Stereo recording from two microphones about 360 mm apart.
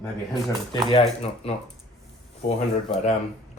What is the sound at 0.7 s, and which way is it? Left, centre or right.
Speech, centre.